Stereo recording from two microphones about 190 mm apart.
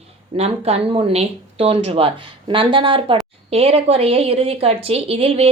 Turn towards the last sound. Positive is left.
turn(degrees=-30)  # may be behind; listen again after turning